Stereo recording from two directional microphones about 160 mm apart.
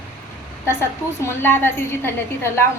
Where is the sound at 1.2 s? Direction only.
15° left (ahead or behind).